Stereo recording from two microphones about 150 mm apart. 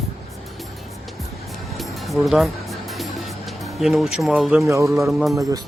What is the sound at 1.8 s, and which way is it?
Music, centre (ahead or behind).